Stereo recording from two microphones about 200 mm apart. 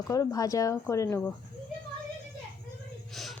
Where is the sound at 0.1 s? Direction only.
15° left (ahead or behind).